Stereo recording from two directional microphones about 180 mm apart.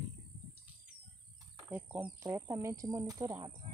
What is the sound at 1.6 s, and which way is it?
Bird, 10° right (ahead or behind).